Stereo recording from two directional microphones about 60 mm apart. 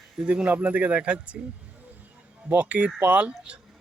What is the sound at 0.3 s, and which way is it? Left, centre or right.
Speech, right.